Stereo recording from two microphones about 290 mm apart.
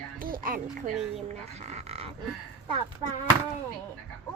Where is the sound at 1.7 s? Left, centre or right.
Right.